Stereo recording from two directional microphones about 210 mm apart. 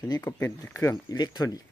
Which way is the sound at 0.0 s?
15° left (ahead or behind).